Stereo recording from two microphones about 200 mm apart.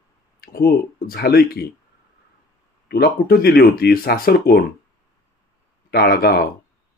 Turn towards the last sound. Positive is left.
turn(degrees=55)  # may be behind; listen again after turning